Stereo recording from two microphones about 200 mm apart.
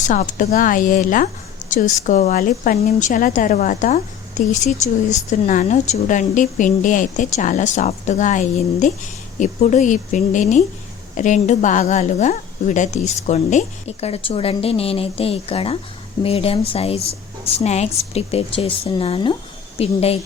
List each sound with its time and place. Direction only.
0.0 s a woman's voice: 40° left (ahead or behind)